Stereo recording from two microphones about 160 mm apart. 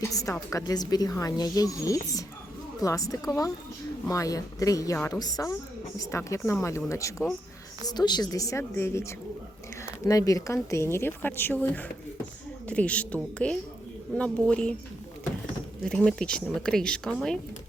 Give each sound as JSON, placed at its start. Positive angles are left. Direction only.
{"t": 0.0, "sound": "a woman's voice", "side_deg": 20}
{"t": 15.8, "sound": "a woman's voice", "side_deg": 5}